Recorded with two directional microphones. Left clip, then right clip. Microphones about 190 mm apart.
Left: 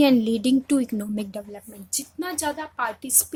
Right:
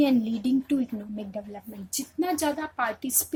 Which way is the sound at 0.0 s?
40° left (ahead or behind).